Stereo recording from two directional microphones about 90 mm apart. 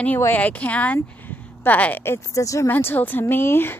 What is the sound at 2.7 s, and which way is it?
A woman's voice, 25° left (ahead or behind).